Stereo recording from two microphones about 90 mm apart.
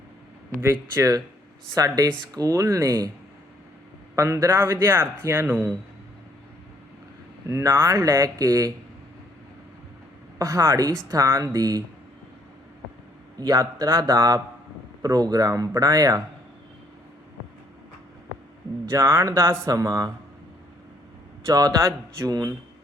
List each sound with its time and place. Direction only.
0.6 s speech: 30° right (ahead or behind)
4.1 s a man's voice: 35° right (ahead or behind)
7.4 s speech: 30° right (ahead or behind)
10.3 s speech: 40° right (ahead or behind)
13.4 s speech: 45° right (ahead or behind)
18.9 s speech: 30° right (ahead or behind)
21.4 s speech: 45° right (ahead or behind)
22.3 s speech: 45° right (ahead or behind)